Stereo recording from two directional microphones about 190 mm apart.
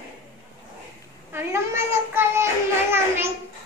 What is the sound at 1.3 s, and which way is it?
Child singing, 15° right (ahead or behind).